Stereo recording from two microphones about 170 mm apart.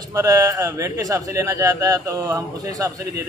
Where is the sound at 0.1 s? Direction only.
20° right (ahead or behind).